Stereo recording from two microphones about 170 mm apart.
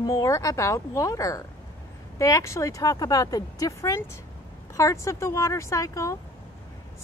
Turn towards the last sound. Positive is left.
turn(degrees=20)  # may be behind; listen again after turning